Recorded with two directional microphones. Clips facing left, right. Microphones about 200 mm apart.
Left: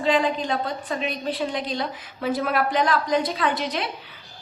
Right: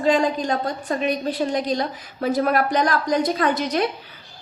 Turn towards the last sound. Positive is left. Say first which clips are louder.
# right 4 dB
turn(degrees=-45)  # may be behind; listen again after turning